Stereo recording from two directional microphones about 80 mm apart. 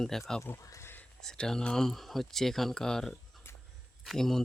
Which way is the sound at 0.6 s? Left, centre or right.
Left.